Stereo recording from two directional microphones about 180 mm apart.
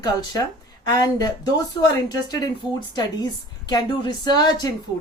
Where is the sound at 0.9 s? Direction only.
20° left (ahead or behind).